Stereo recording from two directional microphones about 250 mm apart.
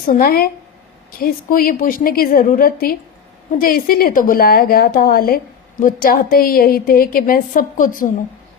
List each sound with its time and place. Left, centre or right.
0.1 s a woman's voice: left